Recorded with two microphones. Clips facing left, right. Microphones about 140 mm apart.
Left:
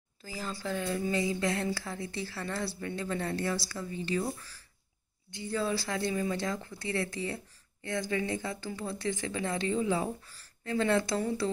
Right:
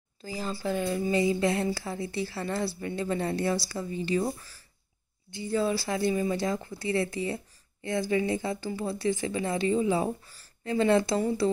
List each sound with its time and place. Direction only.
0.2 s a woman's voice: 20° right (ahead or behind)